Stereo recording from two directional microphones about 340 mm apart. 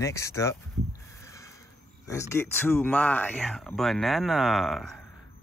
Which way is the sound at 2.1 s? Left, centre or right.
Centre.